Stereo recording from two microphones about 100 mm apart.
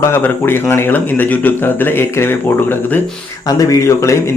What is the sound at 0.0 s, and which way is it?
Speech, 25° left (ahead or behind).